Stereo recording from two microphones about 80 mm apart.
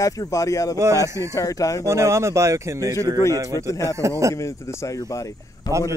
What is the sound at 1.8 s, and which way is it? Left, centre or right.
Speech, right.